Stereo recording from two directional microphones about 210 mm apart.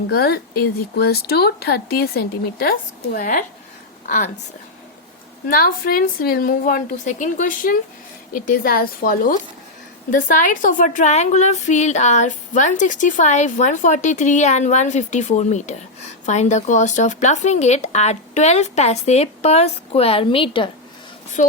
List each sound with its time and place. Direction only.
0.1 s a woman's voice: 45° left (ahead or behind)
5.5 s speech: 45° left (ahead or behind); by 20.7 s 25° left (ahead or behind)
21.4 s speech: 35° left (ahead or behind)